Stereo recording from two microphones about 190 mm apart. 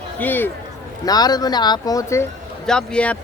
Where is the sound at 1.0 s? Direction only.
20° left (ahead or behind).